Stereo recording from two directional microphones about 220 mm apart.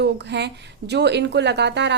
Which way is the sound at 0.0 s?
50° right (ahead or behind).